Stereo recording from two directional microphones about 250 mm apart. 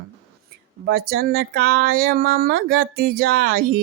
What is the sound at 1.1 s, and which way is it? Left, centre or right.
Speech, right.